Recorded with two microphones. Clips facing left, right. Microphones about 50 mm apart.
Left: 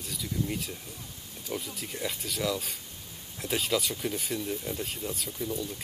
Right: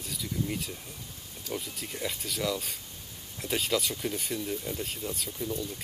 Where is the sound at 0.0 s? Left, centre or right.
Centre.